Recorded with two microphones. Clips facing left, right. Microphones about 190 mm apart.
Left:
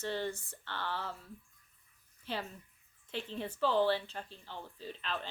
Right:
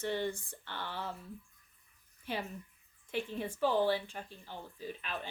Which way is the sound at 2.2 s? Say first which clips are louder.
Right 1 dB; 15° right (ahead or behind).